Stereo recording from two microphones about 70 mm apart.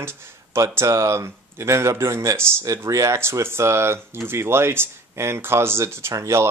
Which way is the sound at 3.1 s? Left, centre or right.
Right.